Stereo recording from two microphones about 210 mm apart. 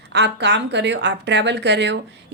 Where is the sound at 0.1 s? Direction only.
55° right (ahead or behind).